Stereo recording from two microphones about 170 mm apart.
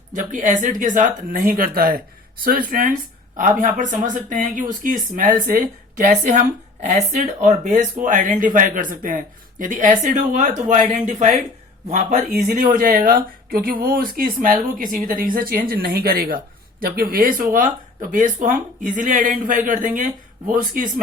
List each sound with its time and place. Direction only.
0.1 s speech: 50° right (ahead or behind)